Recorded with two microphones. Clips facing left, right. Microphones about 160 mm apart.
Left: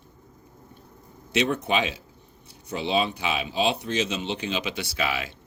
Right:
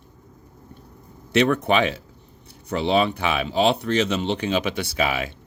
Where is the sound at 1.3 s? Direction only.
60° right (ahead or behind).